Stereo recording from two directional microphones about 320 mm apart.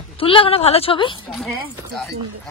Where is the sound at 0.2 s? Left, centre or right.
Centre.